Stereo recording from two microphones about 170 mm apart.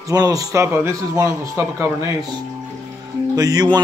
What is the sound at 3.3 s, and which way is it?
Speech, 20° right (ahead or behind).